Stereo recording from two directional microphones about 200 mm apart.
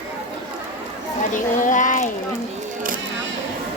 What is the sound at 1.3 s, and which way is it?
Speech, 40° left (ahead or behind).